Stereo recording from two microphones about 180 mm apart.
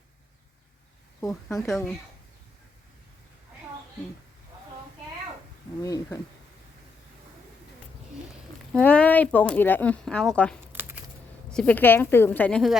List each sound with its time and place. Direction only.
1.6 s speech: 5° left (ahead or behind)
5.8 s speech: 20° left (ahead or behind)
8.7 s speech: 10° left (ahead or behind)
10.7 s a sound: 10° right (ahead or behind)
11.5 s speech: 10° left (ahead or behind)